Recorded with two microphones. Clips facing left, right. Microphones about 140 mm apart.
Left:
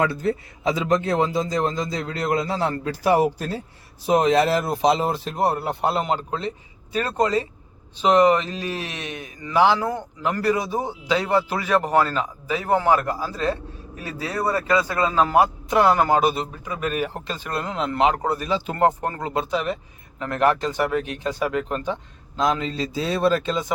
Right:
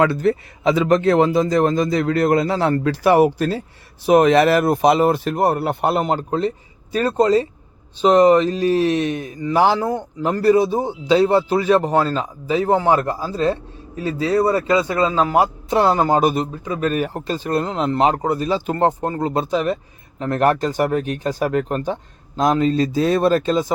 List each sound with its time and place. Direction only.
0.0 s a man's voice: 80° right; by 16.1 s 25° right (ahead or behind)
16.1 s speech: 45° right (ahead or behind)
16.6 s speech: 30° right (ahead or behind)
18.2 s speech: 20° right (ahead or behind)
18.4 s speech: 40° right (ahead or behind)
18.8 s speech: 25° right (ahead or behind)
19.2 s speech: 35° right (ahead or behind)